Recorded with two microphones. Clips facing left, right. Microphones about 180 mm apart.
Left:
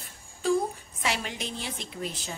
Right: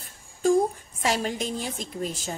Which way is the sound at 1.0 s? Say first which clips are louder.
Right 6 dB; 40° right (ahead or behind).